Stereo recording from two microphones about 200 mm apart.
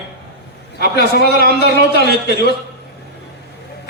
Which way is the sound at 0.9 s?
55° left (ahead or behind).